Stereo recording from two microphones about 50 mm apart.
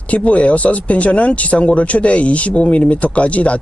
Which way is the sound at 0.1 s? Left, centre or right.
Left.